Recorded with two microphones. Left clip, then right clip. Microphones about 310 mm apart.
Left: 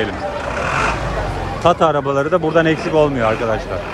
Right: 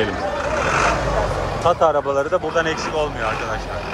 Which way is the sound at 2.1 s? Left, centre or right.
Centre.